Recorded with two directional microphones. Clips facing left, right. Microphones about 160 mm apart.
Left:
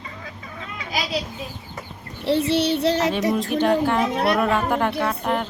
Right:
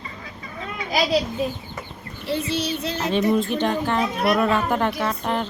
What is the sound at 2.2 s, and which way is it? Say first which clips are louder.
Child singing: left 5 dB; 70° left (ahead or behind).